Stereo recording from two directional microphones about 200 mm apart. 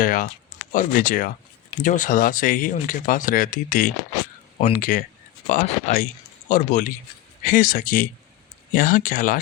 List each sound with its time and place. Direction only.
0.0 s speech: 45° left (ahead or behind)